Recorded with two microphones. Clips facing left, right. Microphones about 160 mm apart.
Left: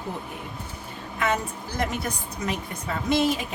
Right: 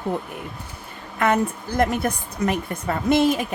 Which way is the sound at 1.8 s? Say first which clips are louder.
Right 7 dB; 55° right (ahead or behind).